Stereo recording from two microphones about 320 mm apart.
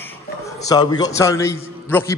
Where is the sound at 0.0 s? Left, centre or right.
Centre.